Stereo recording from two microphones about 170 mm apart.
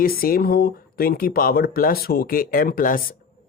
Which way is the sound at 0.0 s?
60° left (ahead or behind).